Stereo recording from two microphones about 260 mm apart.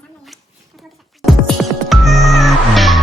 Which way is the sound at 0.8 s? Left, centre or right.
Centre.